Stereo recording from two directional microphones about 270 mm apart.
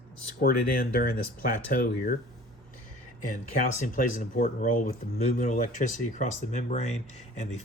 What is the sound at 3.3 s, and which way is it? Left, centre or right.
Speech, left.